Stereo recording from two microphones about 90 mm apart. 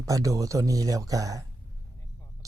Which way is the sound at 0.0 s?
40° right (ahead or behind).